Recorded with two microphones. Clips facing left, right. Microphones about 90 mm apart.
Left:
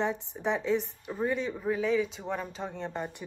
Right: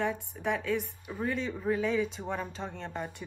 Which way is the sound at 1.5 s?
5° left (ahead or behind).